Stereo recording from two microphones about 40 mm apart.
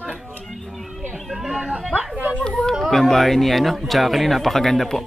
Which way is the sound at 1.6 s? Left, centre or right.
Right.